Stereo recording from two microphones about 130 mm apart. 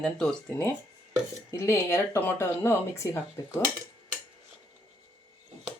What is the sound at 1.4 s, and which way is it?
Speech, 20° left (ahead or behind).